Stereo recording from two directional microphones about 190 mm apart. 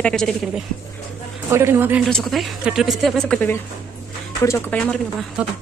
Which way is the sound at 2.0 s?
Centre (ahead or behind).